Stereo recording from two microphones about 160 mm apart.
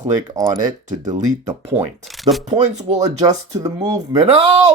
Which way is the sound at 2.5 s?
35° right (ahead or behind).